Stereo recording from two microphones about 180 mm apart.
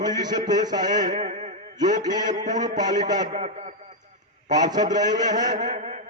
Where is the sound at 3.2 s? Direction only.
45° right (ahead or behind).